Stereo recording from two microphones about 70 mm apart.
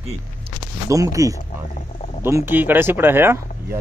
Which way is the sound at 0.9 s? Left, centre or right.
Right.